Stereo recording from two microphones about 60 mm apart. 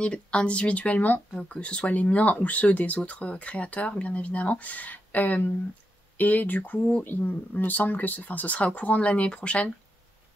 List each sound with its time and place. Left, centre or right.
0.0 s speech: centre